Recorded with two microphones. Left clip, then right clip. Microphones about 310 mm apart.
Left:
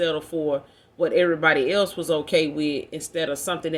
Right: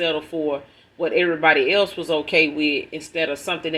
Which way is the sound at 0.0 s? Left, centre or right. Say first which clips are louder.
Right 1 dB; left.